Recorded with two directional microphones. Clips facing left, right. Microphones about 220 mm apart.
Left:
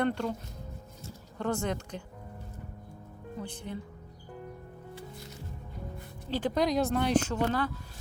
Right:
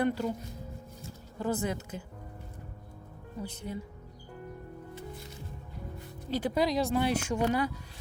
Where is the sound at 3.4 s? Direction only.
10° right (ahead or behind).